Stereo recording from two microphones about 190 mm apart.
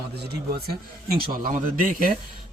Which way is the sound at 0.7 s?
50° right (ahead or behind).